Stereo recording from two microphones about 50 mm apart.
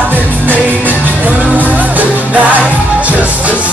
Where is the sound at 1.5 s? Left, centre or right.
Right.